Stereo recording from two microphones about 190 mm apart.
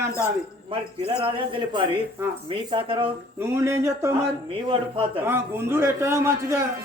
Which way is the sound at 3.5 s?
15° right (ahead or behind).